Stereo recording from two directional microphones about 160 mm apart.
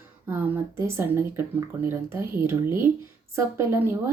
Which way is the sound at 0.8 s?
15° right (ahead or behind).